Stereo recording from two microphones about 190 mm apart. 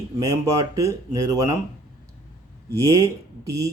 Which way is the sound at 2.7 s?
15° right (ahead or behind).